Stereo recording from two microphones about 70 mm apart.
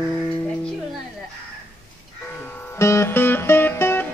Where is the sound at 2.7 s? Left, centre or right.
Left.